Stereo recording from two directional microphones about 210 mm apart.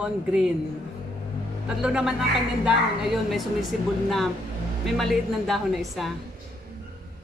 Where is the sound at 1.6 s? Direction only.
5° right (ahead or behind).